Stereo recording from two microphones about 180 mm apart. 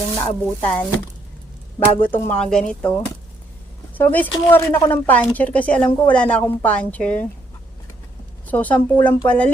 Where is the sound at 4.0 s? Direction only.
10° left (ahead or behind).